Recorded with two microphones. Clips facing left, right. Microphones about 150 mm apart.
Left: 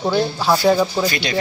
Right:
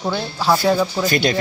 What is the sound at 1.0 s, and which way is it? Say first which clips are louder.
Speech: right 3 dB; 50° right (ahead or behind).